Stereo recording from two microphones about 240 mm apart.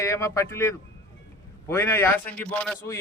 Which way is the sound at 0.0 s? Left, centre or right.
Centre.